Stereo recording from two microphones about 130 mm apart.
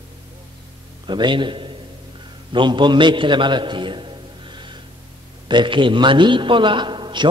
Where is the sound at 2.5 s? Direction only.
35° right (ahead or behind).